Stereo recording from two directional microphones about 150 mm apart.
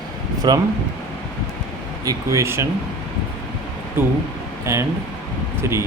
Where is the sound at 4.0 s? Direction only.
15° right (ahead or behind).